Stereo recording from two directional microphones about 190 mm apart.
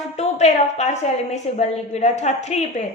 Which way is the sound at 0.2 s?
35° left (ahead or behind).